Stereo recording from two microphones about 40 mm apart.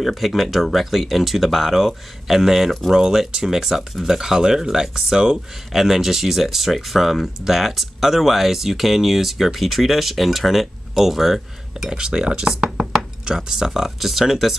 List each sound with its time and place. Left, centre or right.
0.0 s speech: centre
5.7 s speech: centre
11.8 s speech: centre